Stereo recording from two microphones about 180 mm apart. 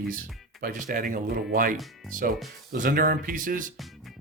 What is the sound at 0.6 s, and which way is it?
Speech, 50° right (ahead or behind).